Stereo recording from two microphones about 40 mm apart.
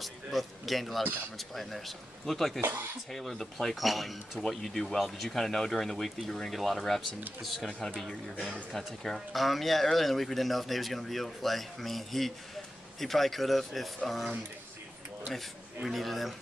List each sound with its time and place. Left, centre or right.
0.0 s speech: centre
2.6 s speech: right
3.1 s speech: centre
3.7 s speech: centre
8.7 s speech: centre
15.3 s speech: centre